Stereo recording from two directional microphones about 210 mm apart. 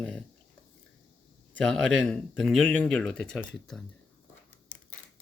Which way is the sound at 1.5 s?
5° left (ahead or behind).